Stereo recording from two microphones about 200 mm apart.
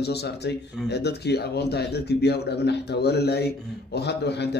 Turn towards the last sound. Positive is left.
turn(degrees=55)  # may be behind; listen again after turning